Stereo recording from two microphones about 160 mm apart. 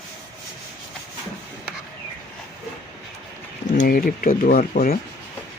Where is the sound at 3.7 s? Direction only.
60° left (ahead or behind).